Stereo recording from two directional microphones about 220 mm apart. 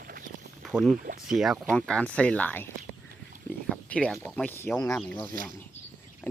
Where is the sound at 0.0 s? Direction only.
40° right (ahead or behind).